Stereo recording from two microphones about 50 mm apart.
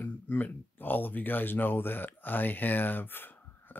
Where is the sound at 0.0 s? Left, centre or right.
Left.